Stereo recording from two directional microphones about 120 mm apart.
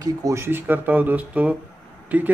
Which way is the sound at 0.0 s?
25° right (ahead or behind).